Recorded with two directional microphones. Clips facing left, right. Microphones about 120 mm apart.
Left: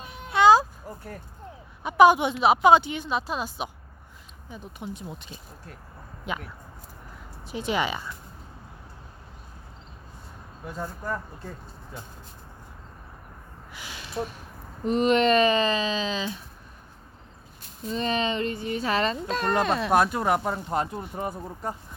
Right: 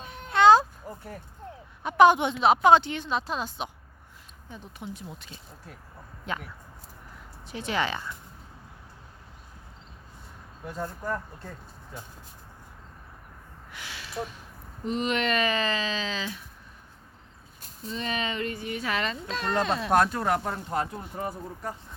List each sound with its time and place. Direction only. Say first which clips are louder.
0.0 s music: even; 5° left (ahead or behind)
1.8 s speech: left 1 dB; 5° left (ahead or behind)
4.8 s speech: left 3 dB; 20° left (ahead or behind)
6.3 s speech: left 1 dB; 10° left (ahead or behind)
7.4 s speech: left 2 dB; 15° left (ahead or behind)
10.7 s speech: even; 5° left (ahead or behind)
13.7 s a sound: left 1 dB; 15° left (ahead or behind)
14.8 s speech: left 7 dB; 45° left (ahead or behind); by 16.4 s 20° left (ahead or behind)
17.8 s speech: left 5 dB; 35° left (ahead or behind)
19.6 s speech: left 3 dB; 60° left (ahead or behind)
19.9 s speech: even; 10° left (ahead or behind)
21.2 s speech: even; 25° left (ahead or behind)